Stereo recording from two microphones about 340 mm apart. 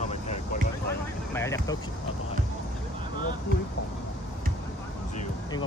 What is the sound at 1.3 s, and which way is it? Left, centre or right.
Speech, centre.